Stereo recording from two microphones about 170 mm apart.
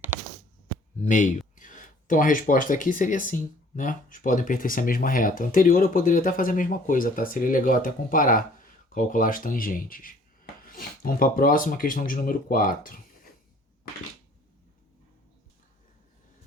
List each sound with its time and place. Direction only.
1.0 s speech: 50° left (ahead or behind)